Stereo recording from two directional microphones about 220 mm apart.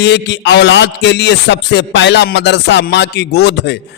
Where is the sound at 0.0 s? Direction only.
50° left (ahead or behind).